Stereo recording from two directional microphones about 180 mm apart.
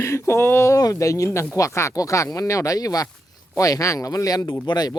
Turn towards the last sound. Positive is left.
turn(degrees=20)  # may be behind; listen again after turning